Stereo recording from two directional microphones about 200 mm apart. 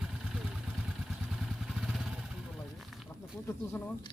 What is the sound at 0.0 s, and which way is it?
Vehicle, 5° right (ahead or behind).